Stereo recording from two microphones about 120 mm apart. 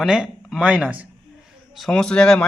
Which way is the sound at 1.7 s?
Centre (ahead or behind).